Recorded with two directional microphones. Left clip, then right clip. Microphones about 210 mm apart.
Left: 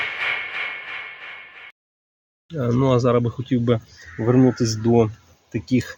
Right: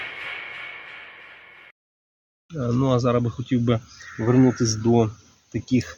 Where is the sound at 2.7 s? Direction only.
35° left (ahead or behind).